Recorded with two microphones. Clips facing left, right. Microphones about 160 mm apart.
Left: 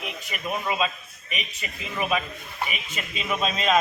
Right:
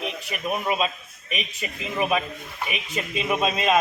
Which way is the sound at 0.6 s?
20° right (ahead or behind).